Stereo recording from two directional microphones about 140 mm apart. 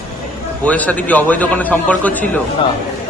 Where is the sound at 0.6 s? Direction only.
10° left (ahead or behind).